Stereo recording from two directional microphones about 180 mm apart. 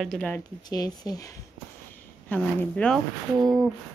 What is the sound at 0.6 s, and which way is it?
Speech, 20° left (ahead or behind).